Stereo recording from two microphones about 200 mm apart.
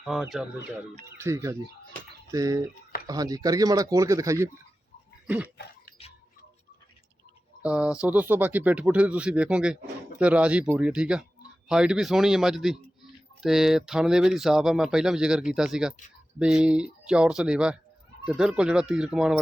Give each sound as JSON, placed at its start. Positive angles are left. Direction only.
{"t": 0.0, "sound": "speech", "side_deg": 0}
{"t": 1.0, "sound": "speech", "side_deg": -15}
{"t": 5.5, "sound": "a sound", "side_deg": 55}
{"t": 7.6, "sound": "speech", "side_deg": -5}